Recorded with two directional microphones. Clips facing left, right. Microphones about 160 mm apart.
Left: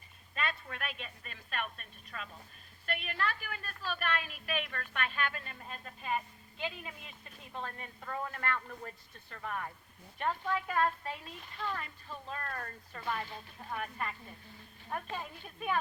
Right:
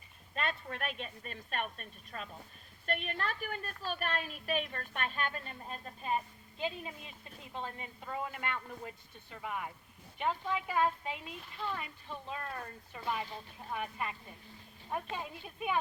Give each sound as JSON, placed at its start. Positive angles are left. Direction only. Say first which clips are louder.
{"t": 0.3, "sound": "a woman's voice", "louder": "right 1 dB", "side_deg": -40}